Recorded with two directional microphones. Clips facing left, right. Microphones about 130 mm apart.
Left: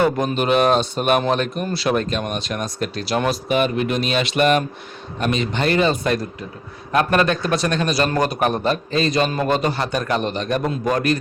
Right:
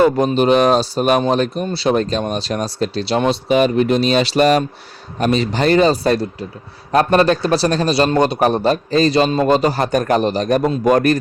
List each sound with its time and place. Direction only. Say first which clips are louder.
0.3 s a man's voice: right 4 dB; 35° right (ahead or behind)